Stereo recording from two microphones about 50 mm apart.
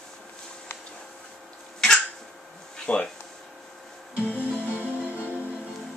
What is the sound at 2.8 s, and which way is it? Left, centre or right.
Speech, left.